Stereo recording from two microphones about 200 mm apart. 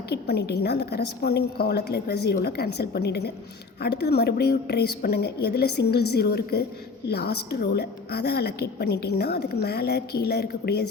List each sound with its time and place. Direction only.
0.1 s a woman's voice: 55° left (ahead or behind)